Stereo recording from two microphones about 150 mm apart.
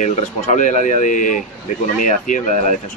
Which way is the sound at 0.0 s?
55° left (ahead or behind).